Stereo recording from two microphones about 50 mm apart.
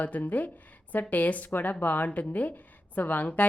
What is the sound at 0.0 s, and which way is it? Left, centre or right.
A woman's voice, left.